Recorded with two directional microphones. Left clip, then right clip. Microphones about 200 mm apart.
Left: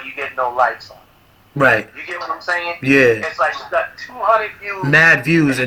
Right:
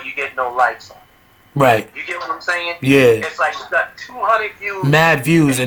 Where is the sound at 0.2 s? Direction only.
25° right (ahead or behind).